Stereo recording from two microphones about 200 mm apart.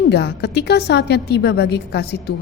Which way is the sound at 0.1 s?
55° left (ahead or behind).